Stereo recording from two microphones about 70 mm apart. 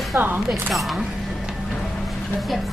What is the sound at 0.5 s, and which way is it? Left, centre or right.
Speech, centre.